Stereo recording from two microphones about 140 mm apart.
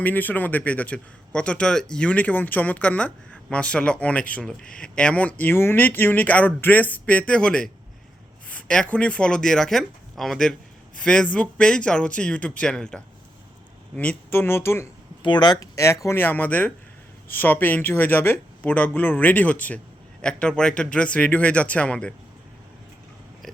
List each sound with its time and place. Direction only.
0.0 s speech: 10° left (ahead or behind)
15.2 s speech: 30° left (ahead or behind); by 22.1 s 5° left (ahead or behind)